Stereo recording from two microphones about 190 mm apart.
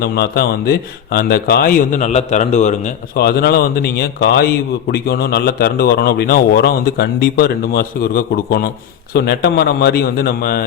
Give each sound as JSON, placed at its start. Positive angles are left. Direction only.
{"t": 0.0, "sound": "a man's voice", "side_deg": 55}
{"t": 3.2, "sound": "a man's voice", "side_deg": 55}